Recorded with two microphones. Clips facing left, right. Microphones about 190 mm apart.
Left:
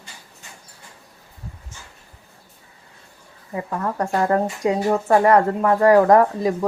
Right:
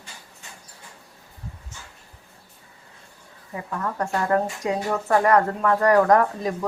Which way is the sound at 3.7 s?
35° left (ahead or behind).